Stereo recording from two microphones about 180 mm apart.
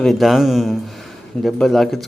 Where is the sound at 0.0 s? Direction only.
Centre (ahead or behind).